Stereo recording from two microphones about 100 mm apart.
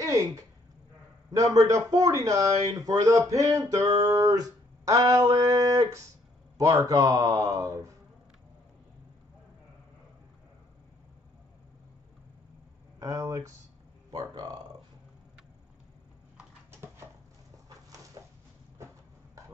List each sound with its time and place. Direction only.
1.3 s speech: 35° right (ahead or behind)
13.0 s speech: 40° right (ahead or behind)